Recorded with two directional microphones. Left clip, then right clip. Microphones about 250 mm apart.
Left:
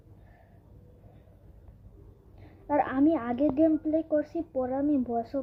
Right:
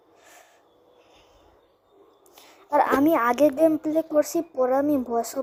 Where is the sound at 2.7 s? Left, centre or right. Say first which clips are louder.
Right 6 dB; centre.